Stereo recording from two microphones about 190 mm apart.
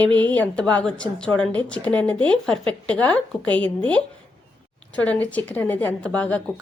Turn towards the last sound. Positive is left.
turn(degrees=5)  # may be behind; listen again after turning